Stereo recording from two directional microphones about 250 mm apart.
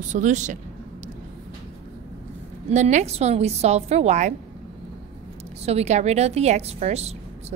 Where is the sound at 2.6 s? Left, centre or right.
Right.